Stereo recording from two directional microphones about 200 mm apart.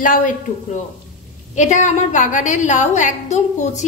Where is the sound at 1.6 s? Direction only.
35° left (ahead or behind).